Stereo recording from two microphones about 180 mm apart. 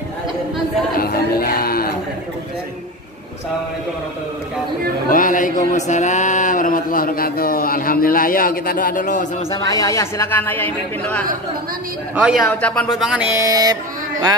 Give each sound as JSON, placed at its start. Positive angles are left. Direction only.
{"t": 0.9, "sound": "music", "side_deg": 55}
{"t": 5.1, "sound": "a sound", "side_deg": 50}
{"t": 5.7, "sound": "speech", "side_deg": 40}
{"t": 9.7, "sound": "speech", "side_deg": 20}
{"t": 12.2, "sound": "speech", "side_deg": -5}